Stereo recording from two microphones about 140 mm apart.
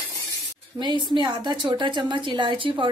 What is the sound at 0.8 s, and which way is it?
A woman's voice, 30° right (ahead or behind).